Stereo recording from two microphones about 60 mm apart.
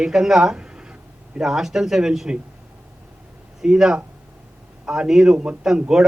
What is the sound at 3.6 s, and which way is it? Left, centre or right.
A man's voice, centre.